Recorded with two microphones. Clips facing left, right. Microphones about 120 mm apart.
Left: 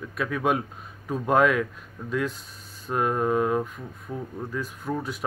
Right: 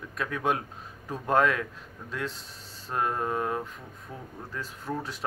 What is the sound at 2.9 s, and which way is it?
Speech, 10° left (ahead or behind).